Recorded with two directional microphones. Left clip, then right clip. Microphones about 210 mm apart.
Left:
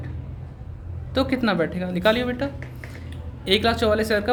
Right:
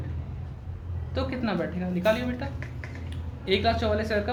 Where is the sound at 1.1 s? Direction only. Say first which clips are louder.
Left 8 dB; 55° left (ahead or behind).